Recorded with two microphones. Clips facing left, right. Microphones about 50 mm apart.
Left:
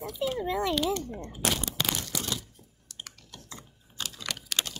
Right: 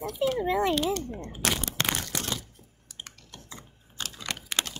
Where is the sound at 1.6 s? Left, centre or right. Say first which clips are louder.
Right 2 dB; right.